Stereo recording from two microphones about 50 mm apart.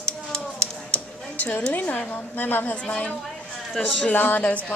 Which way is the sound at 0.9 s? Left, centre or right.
Left.